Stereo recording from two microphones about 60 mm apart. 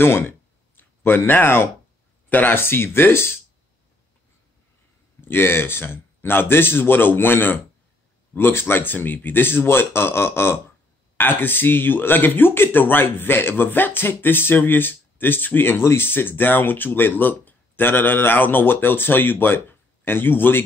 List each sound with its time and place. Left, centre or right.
0.0 s a sound: left
2.2 s speech: left
5.2 s speech: left